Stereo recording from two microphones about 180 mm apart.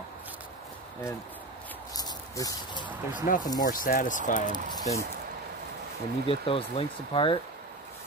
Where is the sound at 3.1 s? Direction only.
45° left (ahead or behind).